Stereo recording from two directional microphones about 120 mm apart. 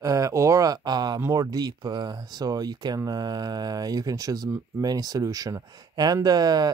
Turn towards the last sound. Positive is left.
turn(degrees=-35)  # may be behind; listen again after turning